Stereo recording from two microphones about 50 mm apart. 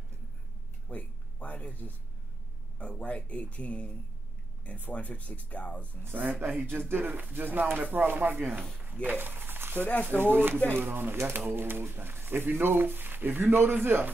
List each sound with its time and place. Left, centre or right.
0.8 s speech: left
6.4 s speech: right
9.8 s speech: left
10.2 s speech: right